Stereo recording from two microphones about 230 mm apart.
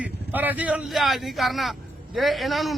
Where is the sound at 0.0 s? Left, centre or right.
Centre.